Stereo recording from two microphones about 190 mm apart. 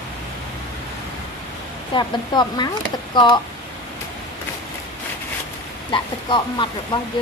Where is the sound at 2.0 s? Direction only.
20° left (ahead or behind).